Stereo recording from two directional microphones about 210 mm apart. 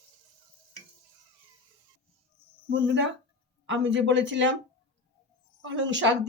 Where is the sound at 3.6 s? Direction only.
60° right (ahead or behind).